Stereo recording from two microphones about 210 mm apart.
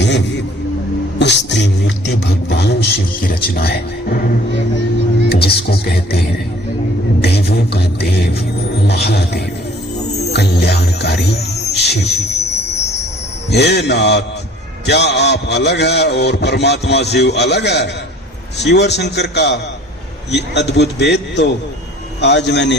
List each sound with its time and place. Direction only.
0.0 s a sound: 55° left (ahead or behind)
5.3 s a man's voice: 50° left (ahead or behind)
7.2 s beatboxing: 50° left (ahead or behind)
8.9 s a man's voice: 50° left (ahead or behind)
10.3 s music: 50° left (ahead or behind)
13.5 s a man's voice: 50° left (ahead or behind)